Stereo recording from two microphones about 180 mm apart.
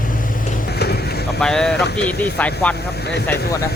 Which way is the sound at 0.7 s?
65° left (ahead or behind).